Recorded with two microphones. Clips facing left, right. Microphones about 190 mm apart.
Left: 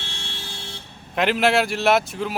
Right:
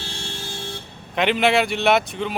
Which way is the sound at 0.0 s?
45° right (ahead or behind).